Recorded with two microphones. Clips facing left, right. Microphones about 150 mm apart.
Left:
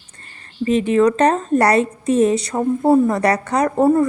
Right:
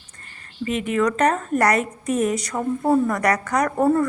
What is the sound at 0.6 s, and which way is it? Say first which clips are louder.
A woman's voice: left 7 dB; 30° left (ahead or behind).